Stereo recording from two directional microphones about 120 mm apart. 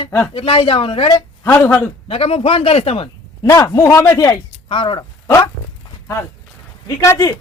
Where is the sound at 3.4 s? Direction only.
30° left (ahead or behind).